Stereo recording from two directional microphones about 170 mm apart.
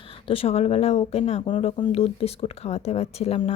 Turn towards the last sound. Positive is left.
turn(degrees=35)  # may be behind; listen again after turning